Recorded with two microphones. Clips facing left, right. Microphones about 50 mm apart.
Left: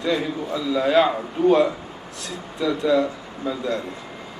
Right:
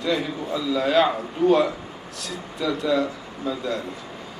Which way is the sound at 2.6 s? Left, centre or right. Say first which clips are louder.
Left 3 dB; left.